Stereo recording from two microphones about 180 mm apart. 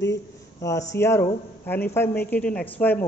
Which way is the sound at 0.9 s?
15° left (ahead or behind).